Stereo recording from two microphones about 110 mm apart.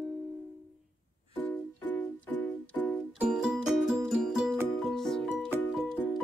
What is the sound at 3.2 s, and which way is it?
Music, 5° right (ahead or behind).